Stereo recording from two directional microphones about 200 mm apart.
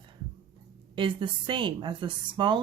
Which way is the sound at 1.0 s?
25° right (ahead or behind).